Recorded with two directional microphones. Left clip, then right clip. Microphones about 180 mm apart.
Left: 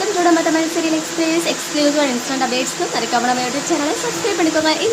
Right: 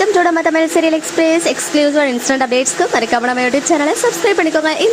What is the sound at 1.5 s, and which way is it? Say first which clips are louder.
Speech: right 4 dB; 35° right (ahead or behind).